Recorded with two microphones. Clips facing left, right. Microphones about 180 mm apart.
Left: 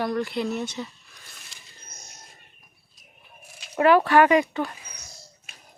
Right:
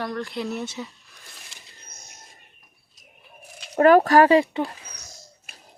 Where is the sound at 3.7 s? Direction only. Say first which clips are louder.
Right 3 dB; 45° right (ahead or behind).